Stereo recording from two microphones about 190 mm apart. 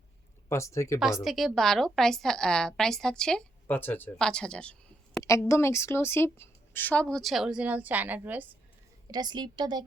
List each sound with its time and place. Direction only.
0.4 s speech: 15° left (ahead or behind)
1.2 s a woman's voice: centre (ahead or behind)
9.1 s a woman's voice: 20° right (ahead or behind)